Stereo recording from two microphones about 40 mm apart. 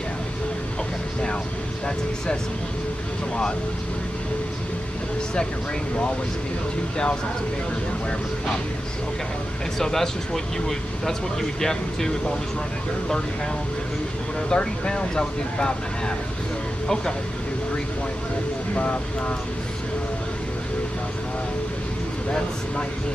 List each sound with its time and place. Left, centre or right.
9.8 s speech: centre
14.5 s speech: left
16.8 s speech: centre
18.8 s speech: left